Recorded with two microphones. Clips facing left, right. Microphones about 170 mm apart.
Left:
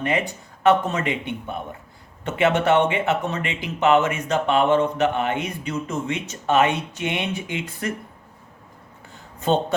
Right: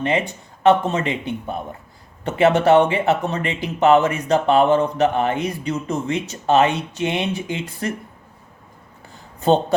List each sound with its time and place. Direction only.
0.6 s speech: 30° right (ahead or behind)
9.4 s speech: 35° right (ahead or behind)